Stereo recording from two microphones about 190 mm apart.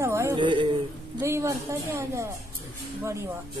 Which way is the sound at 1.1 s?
15° right (ahead or behind).